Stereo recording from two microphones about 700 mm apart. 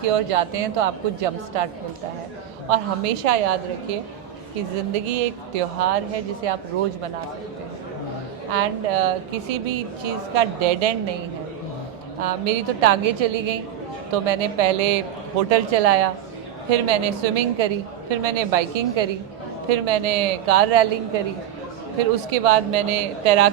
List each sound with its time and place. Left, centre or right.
0.1 s speech: right
2.6 s a woman's voice: right
5.0 s a woman's voice: right
8.5 s a woman's voice: right
12.2 s a woman's voice: right